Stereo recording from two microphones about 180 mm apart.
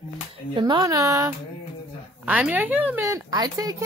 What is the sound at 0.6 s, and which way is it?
A woman's voice, 25° right (ahead or behind).